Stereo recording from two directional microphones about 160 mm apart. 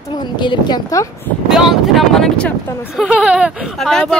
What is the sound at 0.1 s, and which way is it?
A woman's voice, 30° left (ahead or behind).